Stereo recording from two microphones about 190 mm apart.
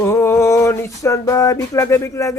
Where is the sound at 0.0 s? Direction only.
15° left (ahead or behind).